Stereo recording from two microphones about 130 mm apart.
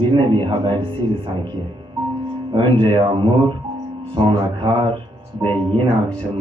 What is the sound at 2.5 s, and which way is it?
A man's voice, 40° right (ahead or behind).